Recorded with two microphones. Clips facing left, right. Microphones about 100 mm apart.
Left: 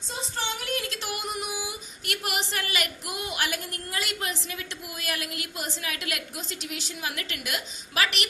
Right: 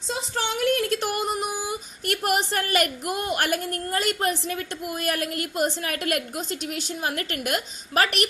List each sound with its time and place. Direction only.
0.1 s speech: 70° right (ahead or behind); by 8.3 s 45° right (ahead or behind)